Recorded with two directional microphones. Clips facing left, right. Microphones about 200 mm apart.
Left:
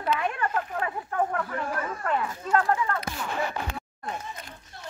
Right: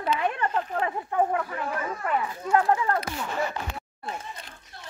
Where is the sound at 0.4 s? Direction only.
25° right (ahead or behind).